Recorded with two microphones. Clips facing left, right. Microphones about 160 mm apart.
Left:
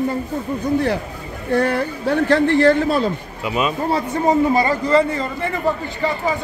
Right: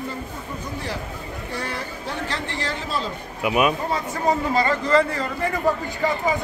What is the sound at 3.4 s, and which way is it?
Speech, 10° right (ahead or behind).